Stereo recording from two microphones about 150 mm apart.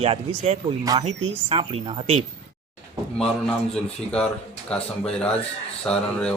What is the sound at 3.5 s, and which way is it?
Speech, 5° left (ahead or behind).